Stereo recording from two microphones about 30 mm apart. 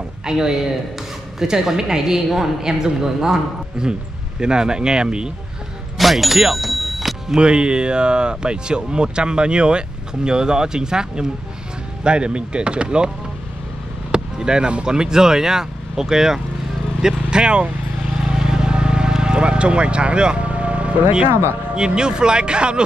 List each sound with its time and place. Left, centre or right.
0.2 s speech: right
5.9 s speech: centre
6.6 s music: centre
7.3 s speech: right
14.1 s basketball bounce: right
14.7 s speech: right
17.0 s vehicle: right
18.3 s vehicle: right
20.4 s music: right
21.7 s speech: right